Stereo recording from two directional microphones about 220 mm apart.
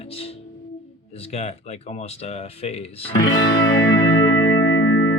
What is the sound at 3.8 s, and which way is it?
Music, 50° left (ahead or behind).